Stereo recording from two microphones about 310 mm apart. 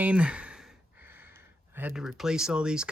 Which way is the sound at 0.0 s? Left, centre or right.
Centre.